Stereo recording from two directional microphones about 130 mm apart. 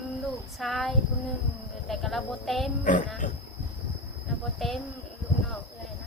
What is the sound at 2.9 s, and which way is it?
Speech, 85° left.